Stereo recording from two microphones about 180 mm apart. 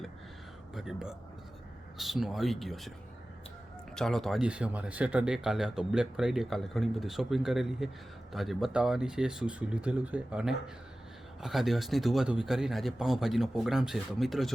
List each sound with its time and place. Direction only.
0.7 s speech: centre (ahead or behind)
3.9 s speech: centre (ahead or behind)